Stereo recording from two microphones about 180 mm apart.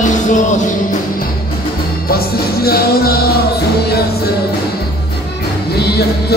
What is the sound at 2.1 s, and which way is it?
Music, 60° left (ahead or behind).